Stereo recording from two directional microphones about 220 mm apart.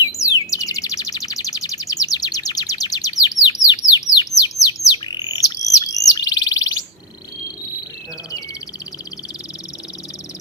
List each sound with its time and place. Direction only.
0.2 s chirp: 15° left (ahead or behind)